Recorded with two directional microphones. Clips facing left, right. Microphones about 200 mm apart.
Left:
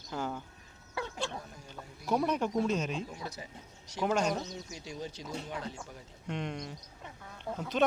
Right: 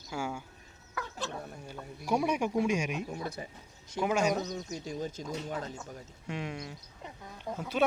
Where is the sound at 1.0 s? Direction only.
30° left (ahead or behind).